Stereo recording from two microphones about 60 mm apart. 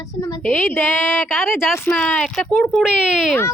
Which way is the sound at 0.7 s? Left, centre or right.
Left.